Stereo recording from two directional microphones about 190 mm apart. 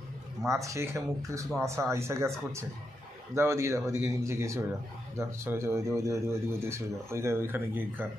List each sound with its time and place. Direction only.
0.5 s speech: 15° right (ahead or behind)